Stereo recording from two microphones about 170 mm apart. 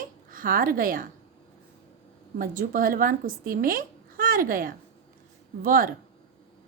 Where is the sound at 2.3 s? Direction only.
55° right (ahead or behind).